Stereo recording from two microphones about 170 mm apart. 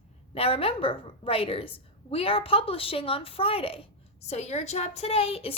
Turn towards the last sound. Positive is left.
turn(degrees=35)  # may be behind; listen again after turning